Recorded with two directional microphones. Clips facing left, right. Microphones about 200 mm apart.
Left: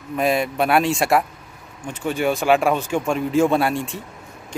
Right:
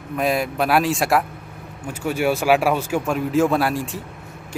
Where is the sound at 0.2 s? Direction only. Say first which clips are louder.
Left 1 dB; centre (ahead or behind).